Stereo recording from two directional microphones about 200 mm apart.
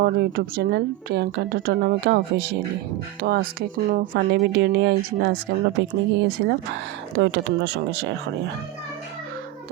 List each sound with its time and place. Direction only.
0.0 s speech: 50° right (ahead or behind)